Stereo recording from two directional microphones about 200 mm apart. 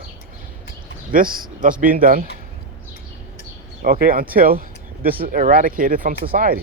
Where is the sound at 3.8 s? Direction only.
50° right (ahead or behind).